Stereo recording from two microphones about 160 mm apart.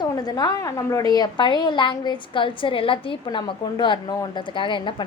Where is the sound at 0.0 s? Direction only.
25° left (ahead or behind).